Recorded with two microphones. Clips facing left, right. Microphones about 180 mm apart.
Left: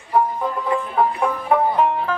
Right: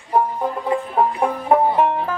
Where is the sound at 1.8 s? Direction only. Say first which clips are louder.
Right 1 dB; 50° right (ahead or behind).